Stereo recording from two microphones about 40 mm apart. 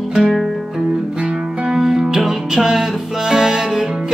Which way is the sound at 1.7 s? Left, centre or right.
Centre.